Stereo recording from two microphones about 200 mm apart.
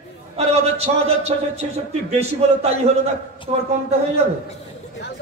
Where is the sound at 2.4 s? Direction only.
30° right (ahead or behind).